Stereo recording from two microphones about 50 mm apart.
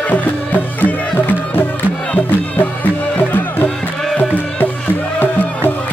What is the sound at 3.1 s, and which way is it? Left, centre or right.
Music, left.